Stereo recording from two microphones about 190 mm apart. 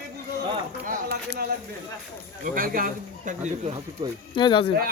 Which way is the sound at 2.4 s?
45° right (ahead or behind).